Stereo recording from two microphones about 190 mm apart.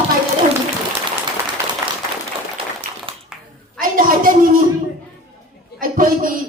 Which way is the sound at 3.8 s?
45° right (ahead or behind).